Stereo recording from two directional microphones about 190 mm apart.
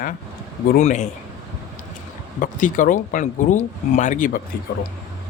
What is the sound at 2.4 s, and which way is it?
Speech, 45° left (ahead or behind).